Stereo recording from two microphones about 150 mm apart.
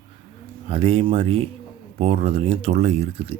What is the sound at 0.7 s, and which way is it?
Speech, 40° right (ahead or behind).